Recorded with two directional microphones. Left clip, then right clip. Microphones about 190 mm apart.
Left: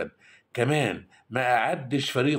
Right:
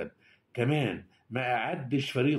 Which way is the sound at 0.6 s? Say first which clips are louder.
Left 5 dB; centre (ahead or behind).